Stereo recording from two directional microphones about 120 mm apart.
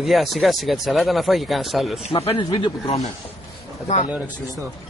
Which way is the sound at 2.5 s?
50° left (ahead or behind).